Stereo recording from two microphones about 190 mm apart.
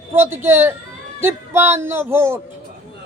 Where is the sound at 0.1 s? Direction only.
10° right (ahead or behind).